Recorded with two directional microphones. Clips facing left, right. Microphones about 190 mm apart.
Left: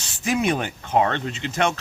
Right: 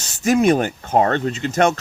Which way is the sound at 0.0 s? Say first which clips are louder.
Right 7 dB; 45° right (ahead or behind).